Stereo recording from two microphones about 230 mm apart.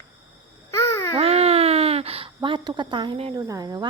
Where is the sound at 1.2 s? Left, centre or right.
Right.